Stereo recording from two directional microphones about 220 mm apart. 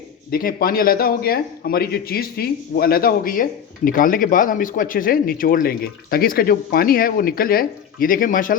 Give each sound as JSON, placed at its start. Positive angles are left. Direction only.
{"t": 0.3, "sound": "a man's voice", "side_deg": 40}